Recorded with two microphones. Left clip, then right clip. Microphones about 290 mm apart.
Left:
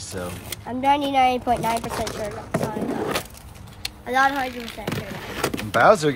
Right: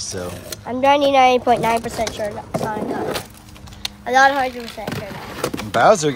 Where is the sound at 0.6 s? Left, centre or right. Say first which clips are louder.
Right 6 dB; right.